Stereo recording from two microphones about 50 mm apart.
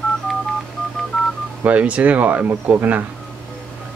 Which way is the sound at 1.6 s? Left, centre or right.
Right.